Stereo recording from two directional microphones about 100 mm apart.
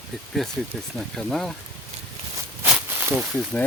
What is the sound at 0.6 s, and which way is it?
Speech, 5° right (ahead or behind).